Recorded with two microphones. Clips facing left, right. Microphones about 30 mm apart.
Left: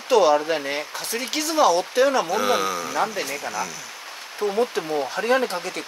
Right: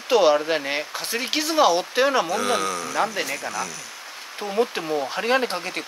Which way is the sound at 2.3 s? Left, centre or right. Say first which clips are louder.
Left 2 dB; centre.